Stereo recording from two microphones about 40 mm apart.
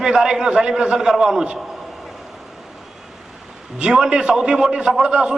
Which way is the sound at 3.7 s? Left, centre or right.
Right.